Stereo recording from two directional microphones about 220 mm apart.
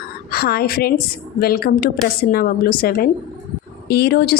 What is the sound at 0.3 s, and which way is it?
A woman's voice, 45° left (ahead or behind).